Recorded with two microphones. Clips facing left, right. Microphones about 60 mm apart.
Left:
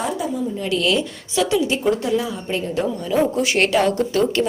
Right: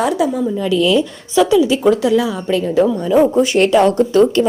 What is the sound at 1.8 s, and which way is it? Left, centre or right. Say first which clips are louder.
Speech: right 7 dB; right.